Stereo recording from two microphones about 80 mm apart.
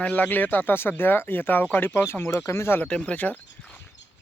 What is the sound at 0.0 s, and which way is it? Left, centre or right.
Speech, centre.